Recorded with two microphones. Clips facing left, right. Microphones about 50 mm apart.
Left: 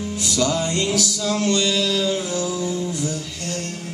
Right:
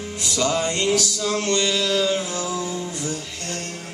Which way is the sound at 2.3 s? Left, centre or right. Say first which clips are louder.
Left 3 dB; centre.